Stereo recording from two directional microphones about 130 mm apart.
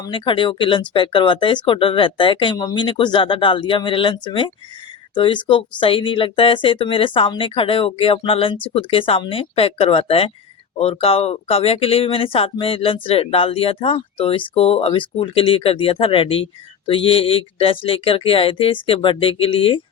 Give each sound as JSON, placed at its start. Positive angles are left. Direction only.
{"t": 0.0, "sound": "speech", "side_deg": 40}